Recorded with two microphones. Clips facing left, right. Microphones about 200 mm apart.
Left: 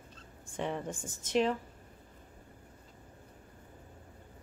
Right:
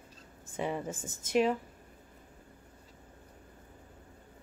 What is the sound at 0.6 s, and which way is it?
Speech, 5° right (ahead or behind).